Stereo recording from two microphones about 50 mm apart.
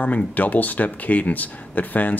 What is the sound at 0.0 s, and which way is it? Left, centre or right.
Speech, left.